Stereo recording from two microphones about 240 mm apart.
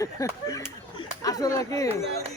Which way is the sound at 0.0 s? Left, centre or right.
Centre.